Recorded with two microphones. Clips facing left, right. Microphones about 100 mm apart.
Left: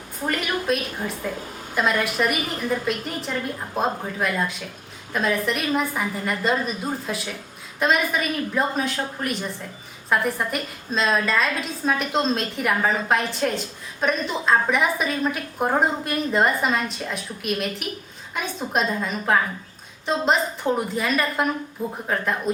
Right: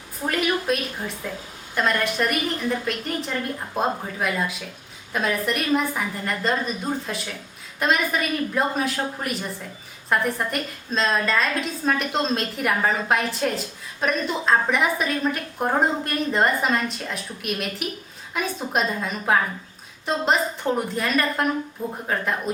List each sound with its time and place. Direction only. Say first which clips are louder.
0.3 s a woman's voice: right 1 dB; centre (ahead or behind)